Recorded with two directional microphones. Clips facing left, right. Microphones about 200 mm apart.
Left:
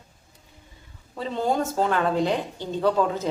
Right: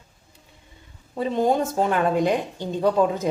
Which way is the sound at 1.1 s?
15° right (ahead or behind).